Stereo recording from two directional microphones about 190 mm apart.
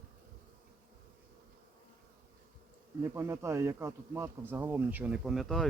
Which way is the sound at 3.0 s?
15° right (ahead or behind).